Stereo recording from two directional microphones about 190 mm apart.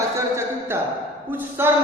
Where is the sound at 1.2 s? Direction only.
10° right (ahead or behind).